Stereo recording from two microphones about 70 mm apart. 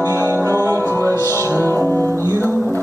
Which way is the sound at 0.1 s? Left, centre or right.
Right.